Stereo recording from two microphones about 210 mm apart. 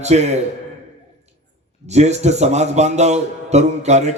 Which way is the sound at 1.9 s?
30° right (ahead or behind).